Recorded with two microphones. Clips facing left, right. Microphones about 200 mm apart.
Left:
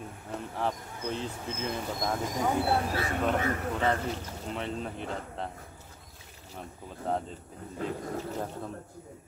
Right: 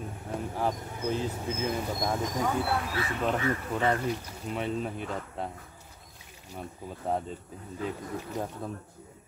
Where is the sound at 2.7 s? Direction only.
40° left (ahead or behind).